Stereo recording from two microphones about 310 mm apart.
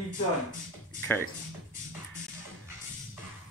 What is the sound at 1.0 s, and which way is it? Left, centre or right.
Music, centre.